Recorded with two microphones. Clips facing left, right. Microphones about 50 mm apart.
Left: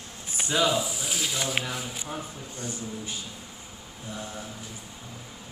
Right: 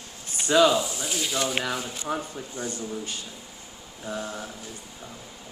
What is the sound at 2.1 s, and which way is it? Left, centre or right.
Speech, right.